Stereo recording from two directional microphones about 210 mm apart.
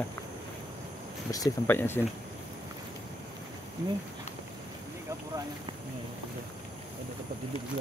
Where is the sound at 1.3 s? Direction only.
15° left (ahead or behind).